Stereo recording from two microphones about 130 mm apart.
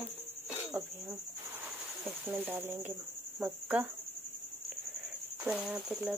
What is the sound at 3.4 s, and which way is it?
Cricket, 10° right (ahead or behind).